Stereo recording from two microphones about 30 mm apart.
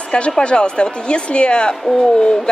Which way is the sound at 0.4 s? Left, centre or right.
Left.